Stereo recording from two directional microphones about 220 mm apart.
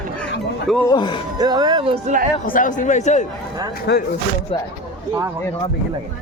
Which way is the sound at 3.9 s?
55° left (ahead or behind).